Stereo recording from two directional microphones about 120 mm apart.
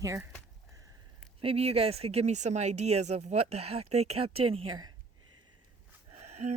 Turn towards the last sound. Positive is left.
turn(degrees=-65)  # may be behind; listen again after turning